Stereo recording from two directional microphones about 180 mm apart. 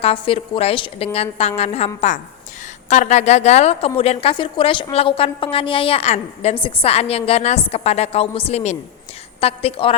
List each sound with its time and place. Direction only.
0.0 s a woman's voice: 30° left (ahead or behind)
2.9 s a woman's voice: 40° left (ahead or behind)